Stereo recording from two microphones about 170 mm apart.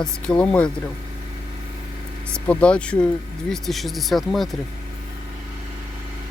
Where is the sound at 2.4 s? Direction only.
5° left (ahead or behind).